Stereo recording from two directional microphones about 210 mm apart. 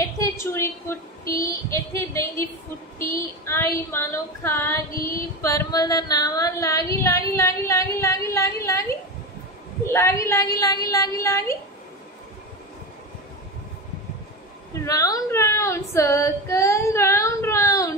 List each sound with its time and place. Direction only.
0.2 s a woman's voice: 10° left (ahead or behind)
1.2 s female singing: 40° left (ahead or behind)
1.7 s speech: 15° left (ahead or behind)
3.4 s speech: 10° left (ahead or behind)
9.8 s speech: 15° left (ahead or behind)
14.9 s speech: 15° left (ahead or behind)